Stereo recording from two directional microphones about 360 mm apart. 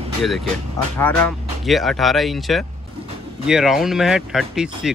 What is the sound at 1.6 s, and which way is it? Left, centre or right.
Speech, centre.